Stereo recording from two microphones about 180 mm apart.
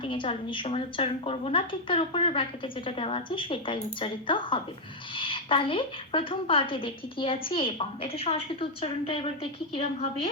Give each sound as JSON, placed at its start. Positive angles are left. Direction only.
{"t": 0.0, "sound": "a woman's voice", "side_deg": 30}